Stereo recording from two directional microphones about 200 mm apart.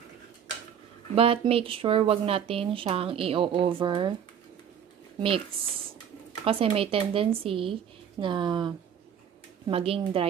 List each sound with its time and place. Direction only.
1.1 s a woman's voice: 30° right (ahead or behind)
5.2 s a woman's voice: 25° right (ahead or behind)